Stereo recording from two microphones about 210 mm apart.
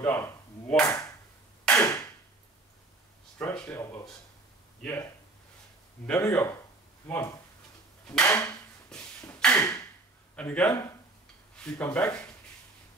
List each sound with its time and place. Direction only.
0.0 s a sound: 5° left (ahead or behind)
3.3 s speech: 5° left (ahead or behind)
6.0 s speech: 10° left (ahead or behind)
8.1 s a sound: 5° left (ahead or behind)
10.3 s a man's voice: 5° left (ahead or behind)
10.7 s speech: 15° left (ahead or behind)
11.5 s speech: 5° left (ahead or behind)